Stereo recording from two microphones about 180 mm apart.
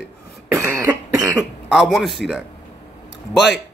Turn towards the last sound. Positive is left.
turn(degrees=0)  # may be behind; listen again after turning